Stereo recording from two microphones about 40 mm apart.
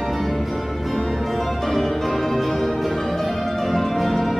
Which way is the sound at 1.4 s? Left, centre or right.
Centre.